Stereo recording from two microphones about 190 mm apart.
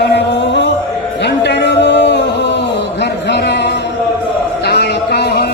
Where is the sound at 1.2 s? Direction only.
65° left (ahead or behind).